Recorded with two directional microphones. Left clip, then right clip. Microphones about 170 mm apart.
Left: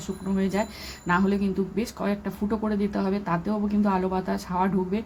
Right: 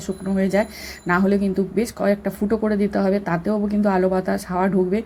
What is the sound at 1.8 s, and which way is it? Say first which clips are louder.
Speech: right 8 dB; 20° right (ahead or behind).